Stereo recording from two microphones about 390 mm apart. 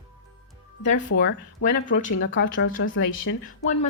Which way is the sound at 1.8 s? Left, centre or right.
Centre.